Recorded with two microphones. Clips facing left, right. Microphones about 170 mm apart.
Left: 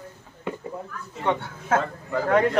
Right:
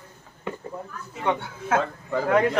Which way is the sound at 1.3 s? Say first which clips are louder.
Left 1 dB; 5° right (ahead or behind).